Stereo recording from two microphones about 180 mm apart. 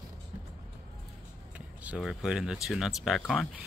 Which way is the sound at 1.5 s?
5° right (ahead or behind).